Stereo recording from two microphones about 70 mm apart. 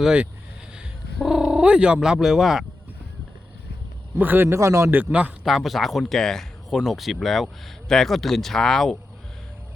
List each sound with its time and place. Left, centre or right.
0.0 s speech: centre
4.2 s a man's voice: right
4.9 s a man's voice: right
5.1 s speech: centre
5.5 s speech: centre